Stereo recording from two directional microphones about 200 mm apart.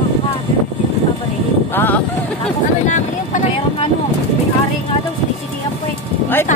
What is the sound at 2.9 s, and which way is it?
A woman's voice, 35° left (ahead or behind).